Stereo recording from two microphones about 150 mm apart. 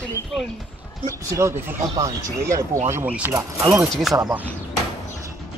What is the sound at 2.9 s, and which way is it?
Speech, 10° right (ahead or behind).